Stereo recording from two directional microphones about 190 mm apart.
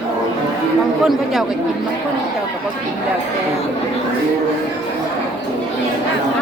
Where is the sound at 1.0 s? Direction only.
Centre (ahead or behind).